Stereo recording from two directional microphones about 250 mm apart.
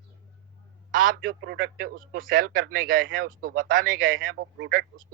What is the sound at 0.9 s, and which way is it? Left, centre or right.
A man's voice, right.